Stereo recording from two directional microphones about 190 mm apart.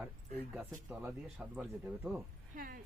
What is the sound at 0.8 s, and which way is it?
Speech, 5° right (ahead or behind).